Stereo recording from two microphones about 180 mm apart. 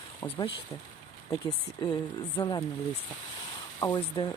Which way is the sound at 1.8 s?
25° left (ahead or behind).